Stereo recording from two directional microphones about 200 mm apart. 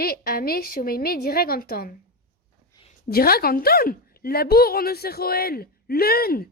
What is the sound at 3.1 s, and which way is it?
A woman's voice, 50° left (ahead or behind).